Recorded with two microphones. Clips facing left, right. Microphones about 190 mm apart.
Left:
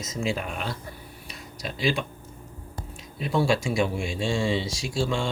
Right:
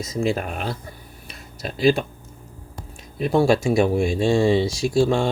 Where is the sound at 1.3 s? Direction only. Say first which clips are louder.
Right 3 dB; 55° right (ahead or behind).